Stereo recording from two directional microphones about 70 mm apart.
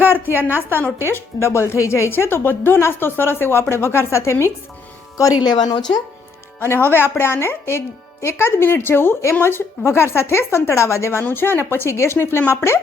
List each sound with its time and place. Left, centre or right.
0.0 s a sound: right
1.0 s speech: left
5.4 s a woman's voice: left
6.6 s speech: left